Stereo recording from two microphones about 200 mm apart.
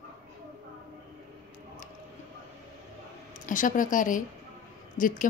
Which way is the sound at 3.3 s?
40° left (ahead or behind).